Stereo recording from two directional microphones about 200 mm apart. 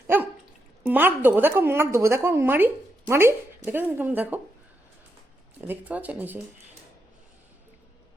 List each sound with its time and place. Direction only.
0.9 s a woman's voice: 10° right (ahead or behind)
5.5 s a woman's voice: 10° right (ahead or behind)